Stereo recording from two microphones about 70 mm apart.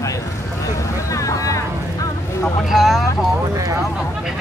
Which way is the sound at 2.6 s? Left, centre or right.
Centre.